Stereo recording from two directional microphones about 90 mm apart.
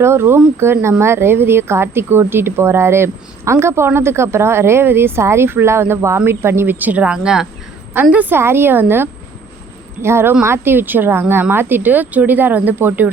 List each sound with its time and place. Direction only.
0.0 s a woman's voice: 25° right (ahead or behind); by 7.4 s 10° right (ahead or behind)
8.1 s a woman's voice: 20° right (ahead or behind)